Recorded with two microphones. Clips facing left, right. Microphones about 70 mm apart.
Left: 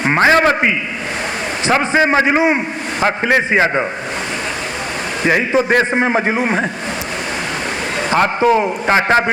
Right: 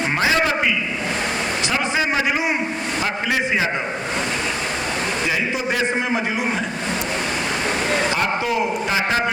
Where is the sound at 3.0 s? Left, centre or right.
Left.